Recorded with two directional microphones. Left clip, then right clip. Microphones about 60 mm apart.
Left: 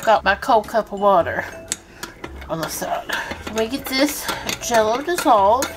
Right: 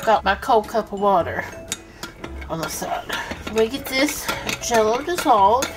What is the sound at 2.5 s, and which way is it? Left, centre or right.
Dishes, left.